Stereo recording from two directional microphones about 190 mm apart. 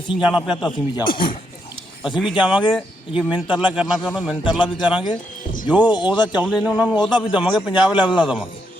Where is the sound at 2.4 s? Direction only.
5° right (ahead or behind).